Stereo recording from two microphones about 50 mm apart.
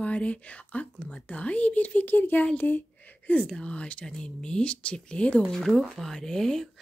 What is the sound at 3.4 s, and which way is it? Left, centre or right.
A woman's voice, left.